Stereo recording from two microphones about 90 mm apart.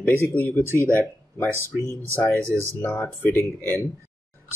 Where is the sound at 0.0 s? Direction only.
25° left (ahead or behind).